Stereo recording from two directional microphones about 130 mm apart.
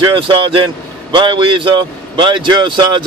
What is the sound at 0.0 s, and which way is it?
Speech, 40° right (ahead or behind).